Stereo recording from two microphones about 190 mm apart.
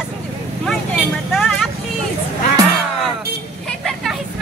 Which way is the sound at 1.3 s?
Centre (ahead or behind).